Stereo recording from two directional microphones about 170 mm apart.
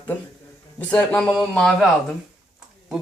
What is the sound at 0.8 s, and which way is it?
Speech, 10° left (ahead or behind).